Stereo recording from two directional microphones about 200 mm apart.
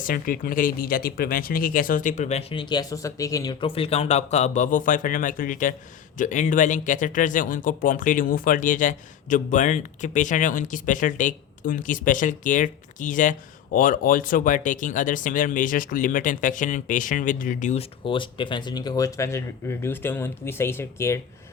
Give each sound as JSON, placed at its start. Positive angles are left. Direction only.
{"t": 0.0, "sound": "speech", "side_deg": 45}